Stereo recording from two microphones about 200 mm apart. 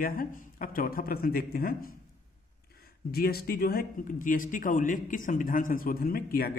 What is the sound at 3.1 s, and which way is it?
A man's voice, 50° left (ahead or behind).